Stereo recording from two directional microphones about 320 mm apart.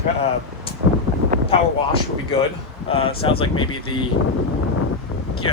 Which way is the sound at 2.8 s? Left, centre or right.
Centre.